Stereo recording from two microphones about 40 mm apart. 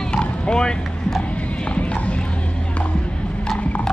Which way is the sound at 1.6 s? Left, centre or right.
Left.